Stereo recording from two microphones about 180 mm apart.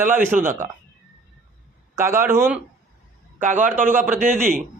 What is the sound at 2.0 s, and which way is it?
Speech, 15° right (ahead or behind).